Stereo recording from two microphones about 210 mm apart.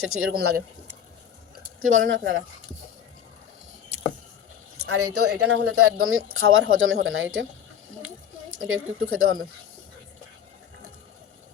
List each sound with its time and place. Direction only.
0.0 s speech: 90° right
1.8 s speech: 70° right (ahead or behind)
4.9 s speech: 90° right; by 7.4 s 70° right (ahead or behind)
8.0 s a sound: 70° right (ahead or behind)